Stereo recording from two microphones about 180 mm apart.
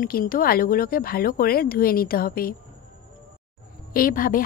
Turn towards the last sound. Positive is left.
turn(degrees=50)  # may be behind; listen again after turning